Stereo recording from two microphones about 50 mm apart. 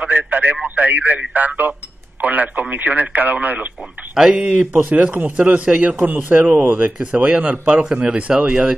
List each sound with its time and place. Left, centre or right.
0.0 s radio: right
0.7 s a man's voice: right
4.1 s speech: centre
4.5 s speech: right
6.0 s a man's voice: right